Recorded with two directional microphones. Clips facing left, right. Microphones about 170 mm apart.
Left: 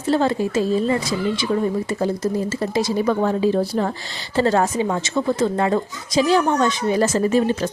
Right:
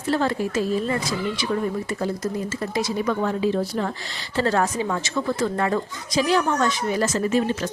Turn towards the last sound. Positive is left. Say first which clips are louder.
# left 4 dB
turn(degrees=35)  # may be behind; listen again after turning